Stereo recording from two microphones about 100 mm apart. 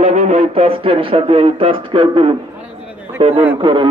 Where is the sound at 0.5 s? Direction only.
75° right (ahead or behind).